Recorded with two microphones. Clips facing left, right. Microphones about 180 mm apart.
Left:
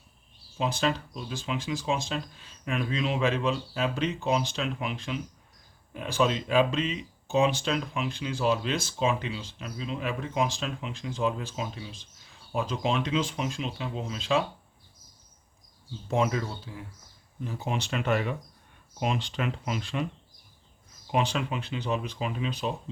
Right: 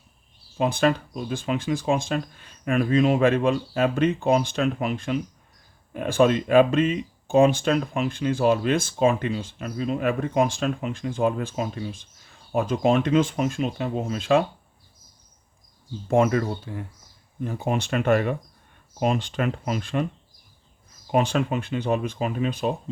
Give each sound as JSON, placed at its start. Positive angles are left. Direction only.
{"t": 0.6, "sound": "speech", "side_deg": -55}
{"t": 16.0, "sound": "speech", "side_deg": -55}
{"t": 21.1, "sound": "speech", "side_deg": -45}